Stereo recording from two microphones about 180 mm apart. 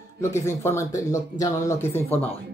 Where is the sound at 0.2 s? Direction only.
15° left (ahead or behind).